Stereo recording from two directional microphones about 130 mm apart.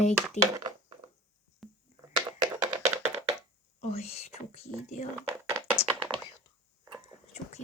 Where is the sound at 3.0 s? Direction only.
20° right (ahead or behind).